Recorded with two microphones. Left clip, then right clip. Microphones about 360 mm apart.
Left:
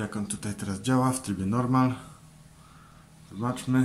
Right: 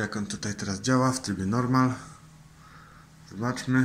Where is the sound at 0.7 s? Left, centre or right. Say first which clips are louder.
Right 1 dB; centre.